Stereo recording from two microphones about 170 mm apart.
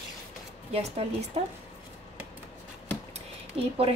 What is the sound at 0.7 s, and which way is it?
Speech, 40° right (ahead or behind).